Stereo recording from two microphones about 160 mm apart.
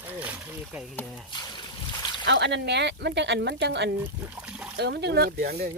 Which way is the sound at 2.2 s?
90° right.